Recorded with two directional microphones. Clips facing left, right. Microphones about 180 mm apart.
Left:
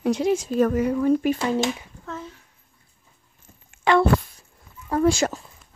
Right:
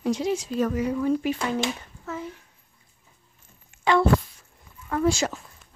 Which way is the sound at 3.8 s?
60° left (ahead or behind).